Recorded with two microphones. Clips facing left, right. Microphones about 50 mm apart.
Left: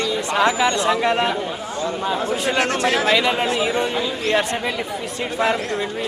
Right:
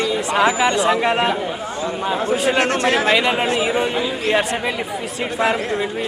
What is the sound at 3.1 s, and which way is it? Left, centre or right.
Speech, centre.